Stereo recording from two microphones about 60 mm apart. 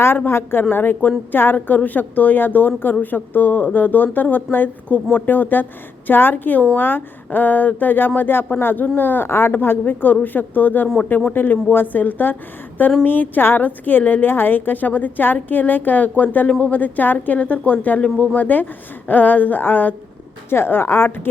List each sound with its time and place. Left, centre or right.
0.3 s a woman's voice: left